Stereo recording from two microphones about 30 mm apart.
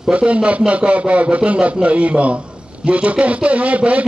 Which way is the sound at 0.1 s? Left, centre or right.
Right.